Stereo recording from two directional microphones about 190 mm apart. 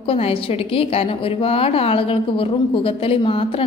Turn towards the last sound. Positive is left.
turn(degrees=30)  # may be behind; listen again after turning